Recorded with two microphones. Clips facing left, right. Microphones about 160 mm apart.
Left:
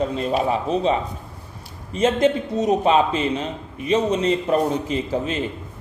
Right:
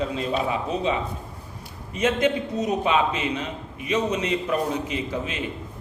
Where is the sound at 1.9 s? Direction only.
30° left (ahead or behind).